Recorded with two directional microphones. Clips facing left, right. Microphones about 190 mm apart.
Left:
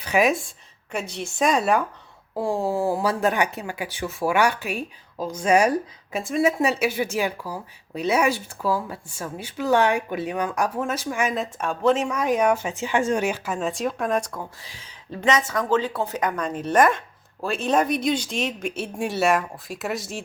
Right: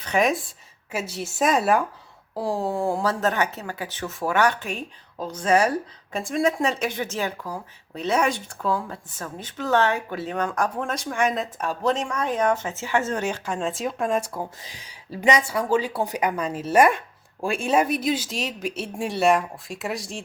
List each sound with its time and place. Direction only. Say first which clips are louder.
0.0 s speech: left 1 dB; 5° left (ahead or behind)
14.3 s a woman's voice: right 3 dB; 25° right (ahead or behind); by 20.2 s centre (ahead or behind)